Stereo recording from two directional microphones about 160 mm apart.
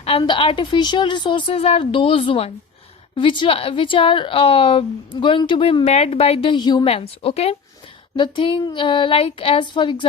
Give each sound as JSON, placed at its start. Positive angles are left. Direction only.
{"t": 0.2, "sound": "a woman's voice", "side_deg": 30}
{"t": 6.8, "sound": "a woman's voice", "side_deg": 40}